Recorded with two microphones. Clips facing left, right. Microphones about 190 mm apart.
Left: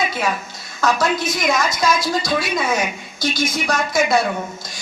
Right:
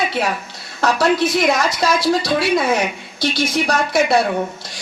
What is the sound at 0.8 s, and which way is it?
A woman's voice, 35° right (ahead or behind).